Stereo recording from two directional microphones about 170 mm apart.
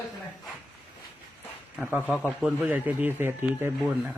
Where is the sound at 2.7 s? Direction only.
10° right (ahead or behind).